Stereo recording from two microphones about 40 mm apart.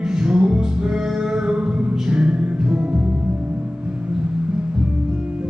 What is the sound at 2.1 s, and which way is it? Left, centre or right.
Music, right.